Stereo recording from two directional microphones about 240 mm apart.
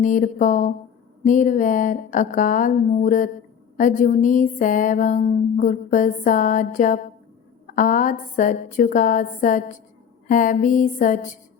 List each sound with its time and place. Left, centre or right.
0.0 s speech: left